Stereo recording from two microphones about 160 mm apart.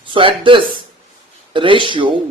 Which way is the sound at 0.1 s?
35° right (ahead or behind).